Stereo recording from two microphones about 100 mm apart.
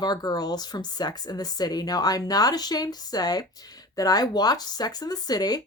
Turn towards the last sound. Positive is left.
turn(degrees=40)  # may be behind; listen again after turning